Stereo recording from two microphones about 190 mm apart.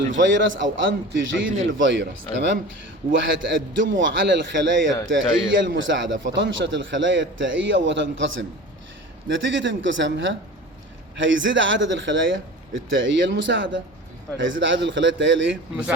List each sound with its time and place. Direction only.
0.1 s a man's voice: 75° right (ahead or behind)
3.1 s a man's voice: 75° right (ahead or behind)
5.0 s a man's voice: 90° right; by 15.5 s 70° right (ahead or behind)